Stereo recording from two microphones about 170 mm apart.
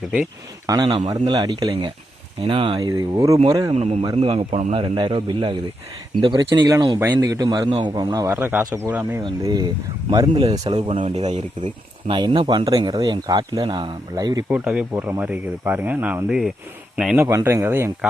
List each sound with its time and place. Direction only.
0.7 s speech: 25° right (ahead or behind)
3.8 s a man's voice: 40° right (ahead or behind); by 8.3 s 20° right (ahead or behind)
8.3 s speech: 10° right (ahead or behind)
9.2 s speech: 25° right (ahead or behind)
10.3 s a man's voice: 35° right (ahead or behind)
12.0 s speech: 30° right (ahead or behind)
14.5 s a man's voice: 5° right (ahead or behind)
17.2 s speech: 15° right (ahead or behind)